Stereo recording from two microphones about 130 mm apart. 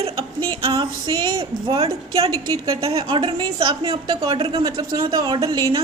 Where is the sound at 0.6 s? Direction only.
40° right (ahead or behind).